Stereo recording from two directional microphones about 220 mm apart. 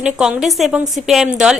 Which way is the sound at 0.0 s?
5° right (ahead or behind).